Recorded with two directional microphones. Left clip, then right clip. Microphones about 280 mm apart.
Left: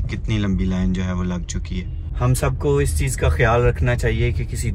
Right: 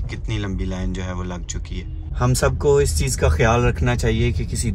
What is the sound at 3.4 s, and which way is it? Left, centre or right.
Speech, centre.